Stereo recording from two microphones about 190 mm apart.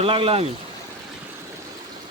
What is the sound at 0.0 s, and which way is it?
Speech, 30° right (ahead or behind).